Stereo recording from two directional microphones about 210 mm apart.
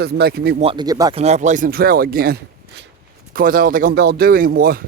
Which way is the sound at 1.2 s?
30° right (ahead or behind).